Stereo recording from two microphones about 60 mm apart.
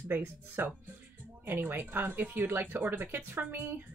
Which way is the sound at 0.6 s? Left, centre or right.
Right.